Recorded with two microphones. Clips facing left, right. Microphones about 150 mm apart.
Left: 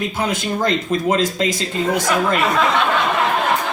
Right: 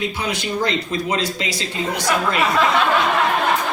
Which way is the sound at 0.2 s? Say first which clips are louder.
Left 6 dB; 45° left (ahead or behind).